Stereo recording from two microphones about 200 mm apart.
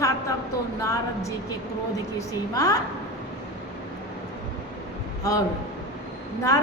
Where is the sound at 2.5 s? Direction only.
20° left (ahead or behind).